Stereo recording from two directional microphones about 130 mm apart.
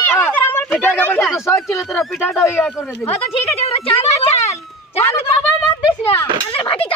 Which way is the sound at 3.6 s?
50° left (ahead or behind).